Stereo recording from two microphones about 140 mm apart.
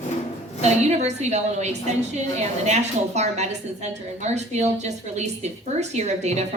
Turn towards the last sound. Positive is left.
turn(degrees=-55)  # may be behind; listen again after turning